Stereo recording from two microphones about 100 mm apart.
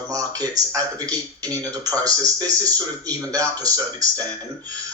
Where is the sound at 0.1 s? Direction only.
35° right (ahead or behind).